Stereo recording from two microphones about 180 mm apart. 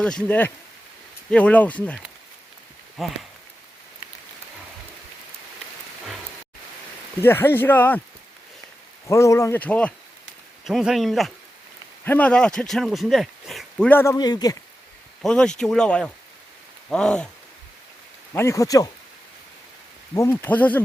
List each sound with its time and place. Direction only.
0.0 s speech: 5° left (ahead or behind)
3.0 s speech: centre (ahead or behind)
7.2 s speech: 10° left (ahead or behind)
9.0 s speech: 15° left (ahead or behind)
15.2 s speech: 5° left (ahead or behind)
18.3 s speech: 15° left (ahead or behind)
20.1 s speech: 15° left (ahead or behind)